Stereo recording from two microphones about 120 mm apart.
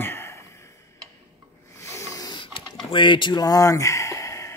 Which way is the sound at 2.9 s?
45° left (ahead or behind).